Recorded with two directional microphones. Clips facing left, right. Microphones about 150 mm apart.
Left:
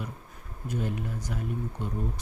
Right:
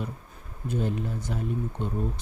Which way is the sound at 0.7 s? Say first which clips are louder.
Right 3 dB; 30° right (ahead or behind).